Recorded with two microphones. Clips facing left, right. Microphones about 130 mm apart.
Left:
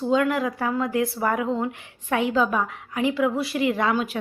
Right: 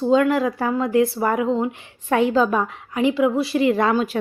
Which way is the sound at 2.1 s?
35° right (ahead or behind).